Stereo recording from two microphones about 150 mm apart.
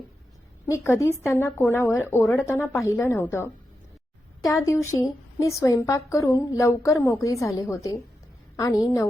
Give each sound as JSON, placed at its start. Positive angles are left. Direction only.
{"t": 0.7, "sound": "a woman's voice", "side_deg": 20}